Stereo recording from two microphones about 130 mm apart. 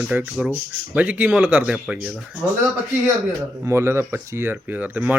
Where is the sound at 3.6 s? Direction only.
20° right (ahead or behind).